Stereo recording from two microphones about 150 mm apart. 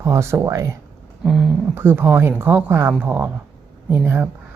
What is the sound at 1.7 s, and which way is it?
Speech, 15° right (ahead or behind).